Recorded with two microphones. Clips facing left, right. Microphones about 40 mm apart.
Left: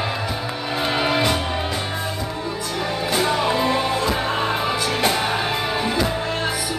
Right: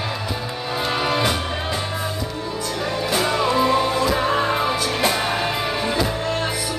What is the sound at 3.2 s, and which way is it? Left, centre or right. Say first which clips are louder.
Music: right 1 dB; centre.